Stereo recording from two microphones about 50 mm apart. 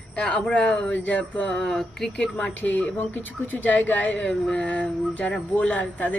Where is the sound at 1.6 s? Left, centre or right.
Centre.